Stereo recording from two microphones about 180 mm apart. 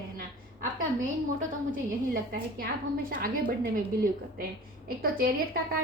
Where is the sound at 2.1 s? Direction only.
55° right (ahead or behind).